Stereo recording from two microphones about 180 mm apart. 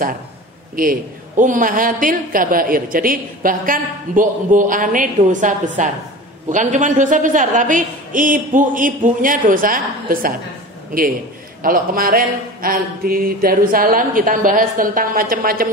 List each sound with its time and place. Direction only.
0.7 s a woman's voice: 50° right (ahead or behind)
11.6 s a woman's voice: 50° right (ahead or behind)